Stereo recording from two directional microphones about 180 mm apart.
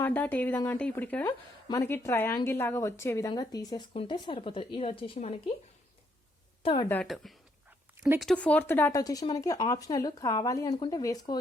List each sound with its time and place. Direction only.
0.0 s speech: 10° left (ahead or behind); by 5.4 s 30° left (ahead or behind)
6.6 s a woman's voice: 30° left (ahead or behind)
6.8 s a woman's voice: 5° left (ahead or behind)